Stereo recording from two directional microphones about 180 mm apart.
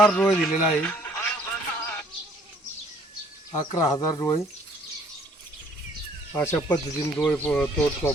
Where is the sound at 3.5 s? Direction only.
20° left (ahead or behind).